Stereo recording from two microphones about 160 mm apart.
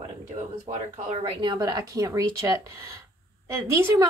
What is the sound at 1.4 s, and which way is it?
A woman's voice, 25° right (ahead or behind).